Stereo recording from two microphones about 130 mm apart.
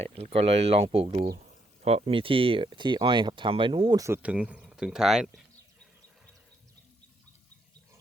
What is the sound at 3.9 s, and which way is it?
Speech, 25° right (ahead or behind).